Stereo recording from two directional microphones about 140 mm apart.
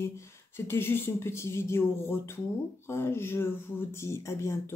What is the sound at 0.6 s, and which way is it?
Speech, 15° left (ahead or behind).